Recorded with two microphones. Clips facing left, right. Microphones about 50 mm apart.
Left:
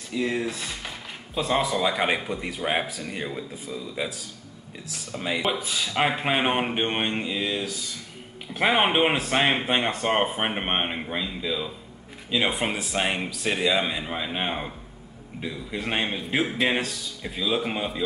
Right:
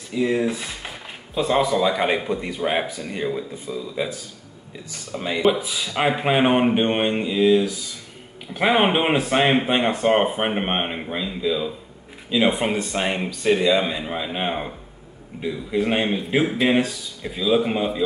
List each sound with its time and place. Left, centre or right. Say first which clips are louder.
0.1 s speech: right 5 dB; centre
1.5 s speech: right 4 dB; centre
5.2 s speech: right 6 dB; centre